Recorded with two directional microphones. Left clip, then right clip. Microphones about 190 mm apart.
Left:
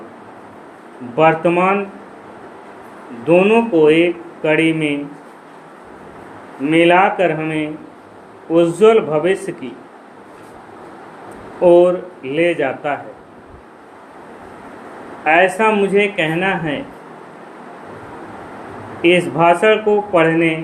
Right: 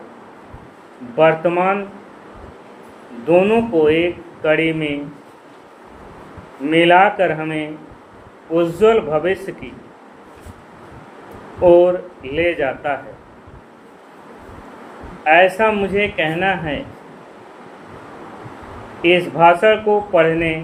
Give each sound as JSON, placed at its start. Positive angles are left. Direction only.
{"t": 1.1, "sound": "speech", "side_deg": 25}
{"t": 3.2, "sound": "speech", "side_deg": 25}
{"t": 6.7, "sound": "speech", "side_deg": 25}
{"t": 11.6, "sound": "speech", "side_deg": 30}
{"t": 15.2, "sound": "speech", "side_deg": 25}
{"t": 19.0, "sound": "speech", "side_deg": 25}